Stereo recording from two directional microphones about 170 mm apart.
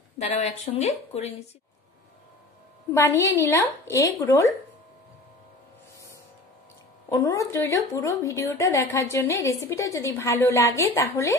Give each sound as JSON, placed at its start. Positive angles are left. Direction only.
{"t": 0.2, "sound": "speech", "side_deg": 40}
{"t": 2.9, "sound": "a woman's voice", "side_deg": 15}
{"t": 7.1, "sound": "a woman's voice", "side_deg": 20}